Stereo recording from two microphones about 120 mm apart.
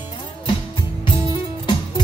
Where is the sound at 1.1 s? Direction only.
40° left (ahead or behind).